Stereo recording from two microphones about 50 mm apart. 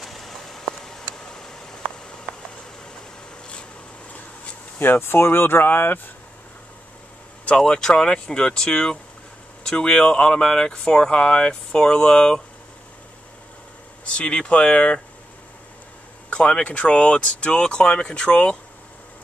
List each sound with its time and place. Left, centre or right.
0.0 s a sound: centre
2.3 s a sound: right
4.7 s speech: left
7.4 s speech: centre
14.0 s speech: left
16.3 s speech: centre